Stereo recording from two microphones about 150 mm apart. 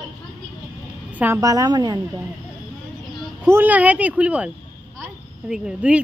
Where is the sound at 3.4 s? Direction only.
10° right (ahead or behind).